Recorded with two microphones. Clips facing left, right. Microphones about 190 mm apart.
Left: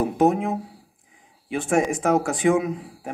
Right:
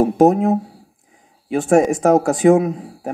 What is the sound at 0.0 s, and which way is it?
Speech, 40° right (ahead or behind).